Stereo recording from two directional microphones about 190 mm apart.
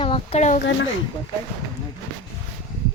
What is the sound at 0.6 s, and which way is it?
Speech, 70° left (ahead or behind).